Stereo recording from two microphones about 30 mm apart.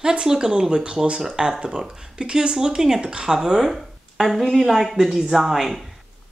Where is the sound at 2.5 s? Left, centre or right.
Centre.